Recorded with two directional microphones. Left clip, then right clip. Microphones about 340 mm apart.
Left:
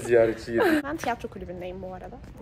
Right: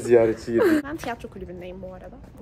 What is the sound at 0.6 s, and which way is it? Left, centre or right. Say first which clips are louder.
Speech: even; centre.